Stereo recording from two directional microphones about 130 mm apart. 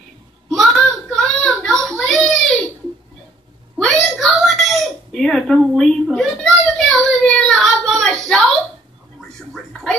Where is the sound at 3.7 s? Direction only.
Centre (ahead or behind).